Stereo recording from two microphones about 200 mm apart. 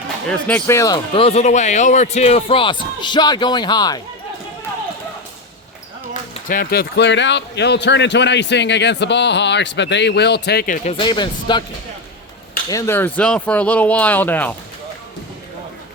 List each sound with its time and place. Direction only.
0.3 s speech: 5° left (ahead or behind)
6.5 s speech: 50° left (ahead or behind)
10.8 s speech: 25° left (ahead or behind)
12.6 s speech: 15° left (ahead or behind)